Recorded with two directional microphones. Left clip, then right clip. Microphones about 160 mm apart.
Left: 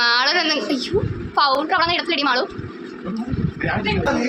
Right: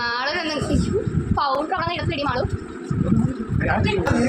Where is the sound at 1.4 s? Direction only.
20° left (ahead or behind).